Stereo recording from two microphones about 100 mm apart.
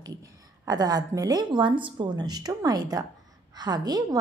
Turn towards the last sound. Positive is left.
turn(degrees=-40)  # may be behind; listen again after turning